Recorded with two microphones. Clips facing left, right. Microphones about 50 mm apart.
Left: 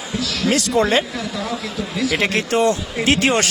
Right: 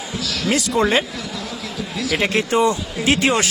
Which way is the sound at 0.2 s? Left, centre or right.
Centre.